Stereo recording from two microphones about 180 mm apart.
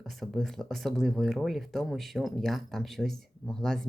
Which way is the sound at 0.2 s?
Centre (ahead or behind).